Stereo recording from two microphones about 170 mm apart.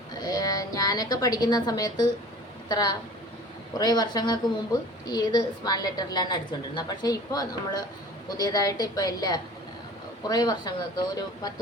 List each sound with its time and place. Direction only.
0.1 s a woman's voice: 25° left (ahead or behind)